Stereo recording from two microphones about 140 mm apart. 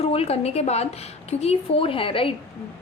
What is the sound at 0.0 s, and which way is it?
A woman's voice, 45° left (ahead or behind).